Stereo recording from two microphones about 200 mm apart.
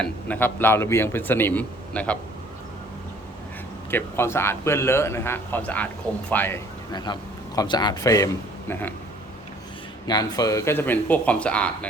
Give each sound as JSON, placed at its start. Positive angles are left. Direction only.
{"t": 0.0, "sound": "speech", "side_deg": 10}
{"t": 3.9, "sound": "speech", "side_deg": 10}
{"t": 6.9, "sound": "a man's voice", "side_deg": 20}
{"t": 10.1, "sound": "speech", "side_deg": 20}